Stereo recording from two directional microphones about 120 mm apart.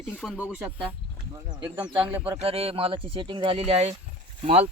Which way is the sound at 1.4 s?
35° right (ahead or behind).